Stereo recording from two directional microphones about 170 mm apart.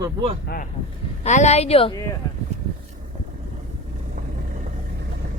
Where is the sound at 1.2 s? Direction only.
40° left (ahead or behind).